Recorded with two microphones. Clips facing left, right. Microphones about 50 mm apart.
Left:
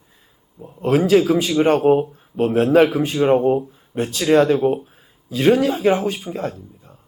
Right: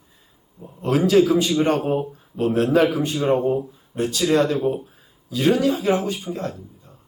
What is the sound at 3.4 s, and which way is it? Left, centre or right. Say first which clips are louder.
Speech: left 4 dB; left.